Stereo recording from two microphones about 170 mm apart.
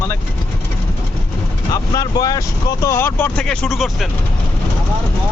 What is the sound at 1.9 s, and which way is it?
Speech, 20° left (ahead or behind).